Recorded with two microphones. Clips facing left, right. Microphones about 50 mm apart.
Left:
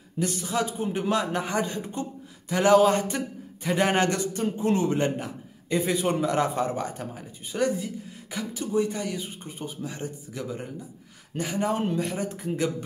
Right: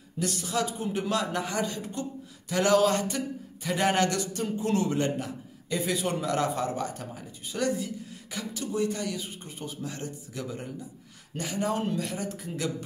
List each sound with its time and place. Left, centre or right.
0.2 s a man's voice: centre